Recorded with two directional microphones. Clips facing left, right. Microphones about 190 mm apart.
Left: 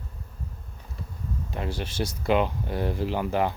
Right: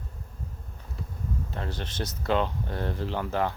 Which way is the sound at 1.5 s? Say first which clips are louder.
Left 3 dB; 15° left (ahead or behind).